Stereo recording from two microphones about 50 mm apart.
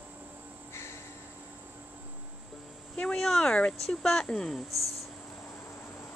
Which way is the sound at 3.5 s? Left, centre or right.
Centre.